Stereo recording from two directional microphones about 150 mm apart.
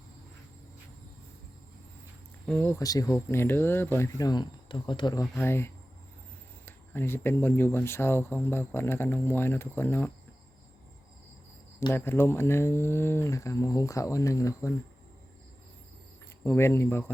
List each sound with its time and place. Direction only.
2.5 s speech: 10° left (ahead or behind)
2.8 s speech: 25° left (ahead or behind)
5.4 s speech: 15° left (ahead or behind)
11.9 s speech: 15° left (ahead or behind)
16.4 s speech: 15° left (ahead or behind)